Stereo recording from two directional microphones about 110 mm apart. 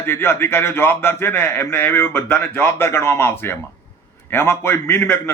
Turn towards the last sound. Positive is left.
turn(degrees=20)  # may be behind; listen again after turning